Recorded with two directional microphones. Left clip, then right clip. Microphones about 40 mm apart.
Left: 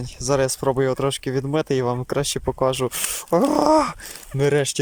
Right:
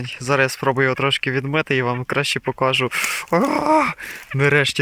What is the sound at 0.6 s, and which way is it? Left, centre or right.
Speech, left.